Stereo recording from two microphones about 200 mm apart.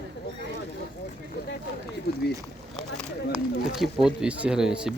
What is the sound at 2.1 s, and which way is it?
Speech, 50° left (ahead or behind).